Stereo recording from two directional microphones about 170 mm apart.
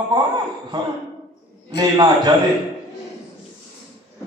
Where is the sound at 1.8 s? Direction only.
20° right (ahead or behind).